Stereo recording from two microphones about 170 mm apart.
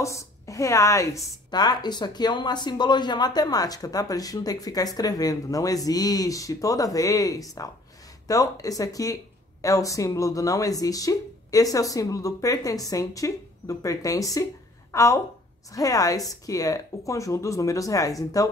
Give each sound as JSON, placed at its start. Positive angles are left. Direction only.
{"t": 0.0, "sound": "speech", "side_deg": 20}